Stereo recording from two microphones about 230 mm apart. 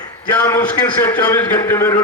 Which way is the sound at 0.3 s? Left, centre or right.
Centre.